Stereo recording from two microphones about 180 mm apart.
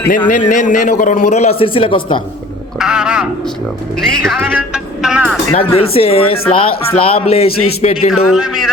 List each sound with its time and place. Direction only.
0.3 s a man's voice: 45° left (ahead or behind); by 2.2 s 30° left (ahead or behind)
2.7 s speech: 5° right (ahead or behind)
4.4 s speech: 5° right (ahead or behind)
5.7 s speech: 35° left (ahead or behind)
8.1 s speech: centre (ahead or behind)